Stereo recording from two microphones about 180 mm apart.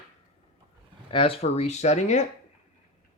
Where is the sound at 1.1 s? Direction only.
30° left (ahead or behind).